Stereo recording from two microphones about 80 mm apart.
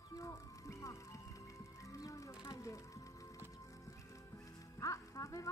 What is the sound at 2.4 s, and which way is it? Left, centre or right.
Music, left.